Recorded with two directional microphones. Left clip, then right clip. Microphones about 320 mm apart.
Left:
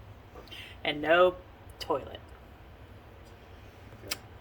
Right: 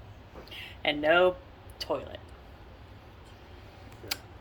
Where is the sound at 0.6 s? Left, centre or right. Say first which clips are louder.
Right 3 dB; centre.